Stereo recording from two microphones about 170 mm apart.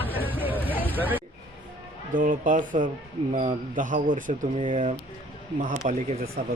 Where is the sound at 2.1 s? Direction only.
50° right (ahead or behind).